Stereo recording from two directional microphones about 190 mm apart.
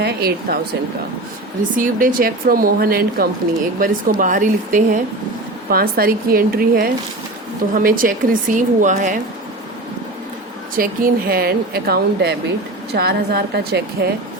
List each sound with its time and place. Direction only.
0.0 s speech: 55° right (ahead or behind)
1.7 s speech: 45° right (ahead or behind)
10.8 s speech: 50° right (ahead or behind)